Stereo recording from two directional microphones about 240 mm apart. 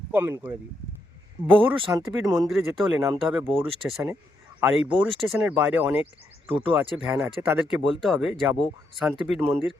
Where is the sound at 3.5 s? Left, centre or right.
Right.